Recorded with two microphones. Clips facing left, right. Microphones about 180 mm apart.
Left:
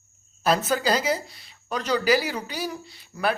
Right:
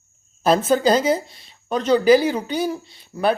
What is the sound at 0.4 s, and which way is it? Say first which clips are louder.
Speech: right 6 dB; 25° right (ahead or behind).